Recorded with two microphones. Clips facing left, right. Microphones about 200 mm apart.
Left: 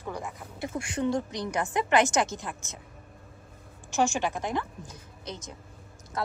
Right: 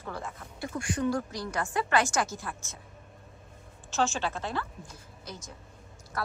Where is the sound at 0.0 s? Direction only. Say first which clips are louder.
Left 2 dB; 15° left (ahead or behind).